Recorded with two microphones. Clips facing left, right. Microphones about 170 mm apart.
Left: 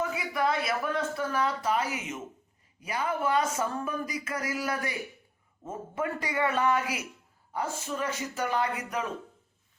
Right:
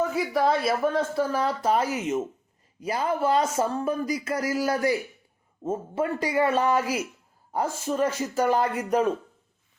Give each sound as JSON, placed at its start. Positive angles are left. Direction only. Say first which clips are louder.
{"t": 0.3, "sound": "speech", "louder": "right 5 dB", "side_deg": -35}